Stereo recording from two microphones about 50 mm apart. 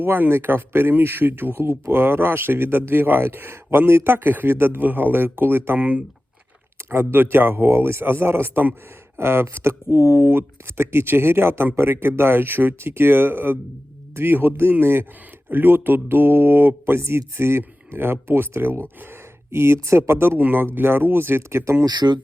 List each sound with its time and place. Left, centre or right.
0.0 s speech: right
5.8 s speech: right
6.7 s speech: right
20.4 s speech: right
21.6 s speech: right